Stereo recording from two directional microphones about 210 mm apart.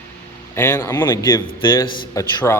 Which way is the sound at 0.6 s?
10° left (ahead or behind).